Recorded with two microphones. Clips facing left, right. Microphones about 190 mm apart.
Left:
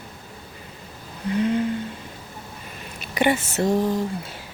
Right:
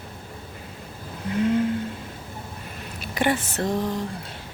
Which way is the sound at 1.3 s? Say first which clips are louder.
Even; centre (ahead or behind).